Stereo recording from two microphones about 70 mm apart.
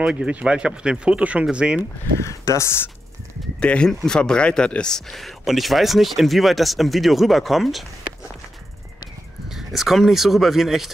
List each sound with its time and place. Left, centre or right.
0.0 s speech: centre
2.1 s speech: left
3.5 s speech: centre
9.5 s speech: centre